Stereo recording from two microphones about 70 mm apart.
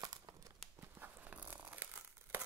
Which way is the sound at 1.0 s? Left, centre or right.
Right.